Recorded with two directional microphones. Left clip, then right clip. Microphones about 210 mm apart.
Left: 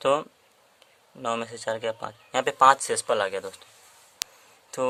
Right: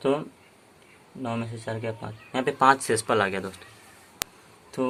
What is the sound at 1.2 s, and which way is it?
Speech, 50° left (ahead or behind).